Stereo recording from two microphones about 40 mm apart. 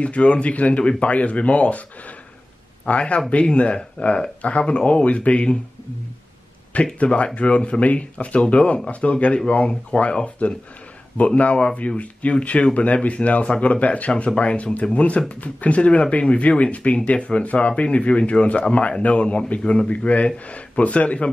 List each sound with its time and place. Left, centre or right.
0.0 s speech: left
2.8 s speech: left
6.7 s a man's voice: left
19.9 s speech: left